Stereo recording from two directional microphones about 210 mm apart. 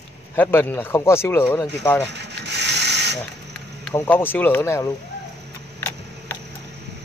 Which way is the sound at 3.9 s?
10° left (ahead or behind).